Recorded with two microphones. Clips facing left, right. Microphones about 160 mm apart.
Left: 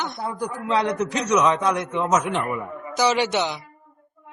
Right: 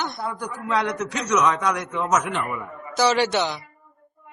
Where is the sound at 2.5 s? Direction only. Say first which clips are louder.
Left 3 dB; 15° left (ahead or behind).